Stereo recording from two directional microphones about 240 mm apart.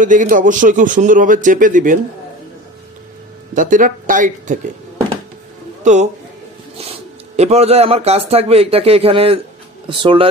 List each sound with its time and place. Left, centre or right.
0.0 s a man's voice: right
3.5 s a man's voice: right
5.9 s speech: right